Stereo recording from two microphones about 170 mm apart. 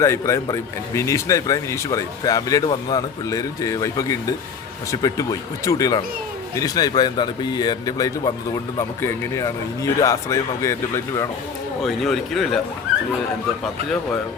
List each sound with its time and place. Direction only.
0.0 s speech: 15° left (ahead or behind)
11.8 s speech: centre (ahead or behind)